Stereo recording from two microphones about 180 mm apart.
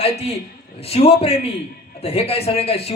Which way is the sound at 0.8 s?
35° left (ahead or behind).